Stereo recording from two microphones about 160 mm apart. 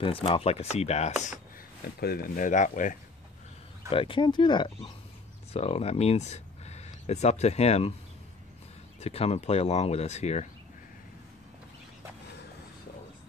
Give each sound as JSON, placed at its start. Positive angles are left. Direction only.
{"t": 0.0, "sound": "speech", "side_deg": 35}
{"t": 2.0, "sound": "speech", "side_deg": 75}
{"t": 3.9, "sound": "speech", "side_deg": 35}
{"t": 9.0, "sound": "speech", "side_deg": 40}